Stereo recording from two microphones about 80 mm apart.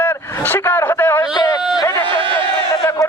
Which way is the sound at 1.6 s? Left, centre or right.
Centre.